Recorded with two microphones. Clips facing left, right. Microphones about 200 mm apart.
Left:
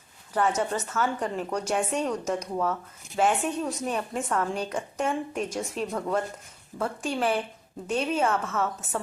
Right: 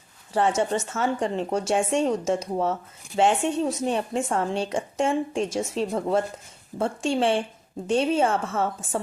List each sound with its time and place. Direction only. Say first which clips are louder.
0.3 s a woman's voice: right 3 dB; 30° right (ahead or behind)